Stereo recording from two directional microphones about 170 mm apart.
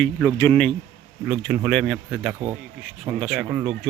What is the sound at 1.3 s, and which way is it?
Speech, 10° right (ahead or behind).